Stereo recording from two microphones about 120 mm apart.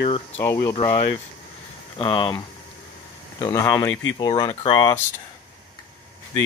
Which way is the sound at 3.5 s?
30° left (ahead or behind).